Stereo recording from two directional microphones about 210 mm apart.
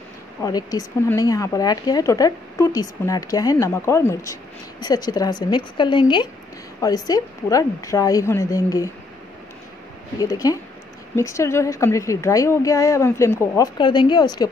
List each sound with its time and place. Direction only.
0.4 s a woman's voice: 20° left (ahead or behind)
10.1 s speech: 15° left (ahead or behind)